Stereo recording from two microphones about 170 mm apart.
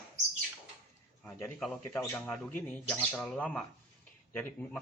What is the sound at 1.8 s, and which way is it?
Speech, 10° left (ahead or behind).